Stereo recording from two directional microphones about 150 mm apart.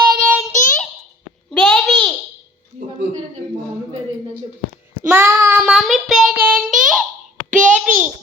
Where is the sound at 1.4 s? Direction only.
5° left (ahead or behind).